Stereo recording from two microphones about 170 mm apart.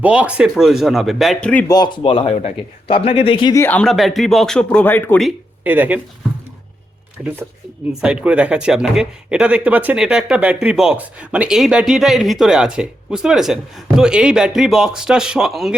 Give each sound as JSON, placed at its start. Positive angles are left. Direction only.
{"t": 0.0, "sound": "speech", "side_deg": -5}
{"t": 1.6, "sound": "speech", "side_deg": 25}
{"t": 3.5, "sound": "speech", "side_deg": 10}
{"t": 5.6, "sound": "speech", "side_deg": -10}
{"t": 8.0, "sound": "speech", "side_deg": -5}